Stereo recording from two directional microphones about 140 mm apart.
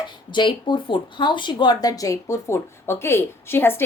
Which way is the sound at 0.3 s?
35° left (ahead or behind).